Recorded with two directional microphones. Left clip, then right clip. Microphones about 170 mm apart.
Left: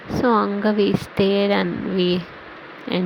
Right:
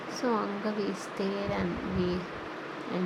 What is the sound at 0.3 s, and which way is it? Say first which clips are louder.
Speech: left 12 dB; 35° left (ahead or behind).